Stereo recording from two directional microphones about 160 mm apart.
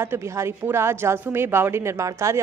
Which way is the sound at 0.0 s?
15° right (ahead or behind).